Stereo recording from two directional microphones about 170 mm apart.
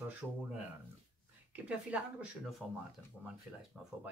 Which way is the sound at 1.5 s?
10° right (ahead or behind).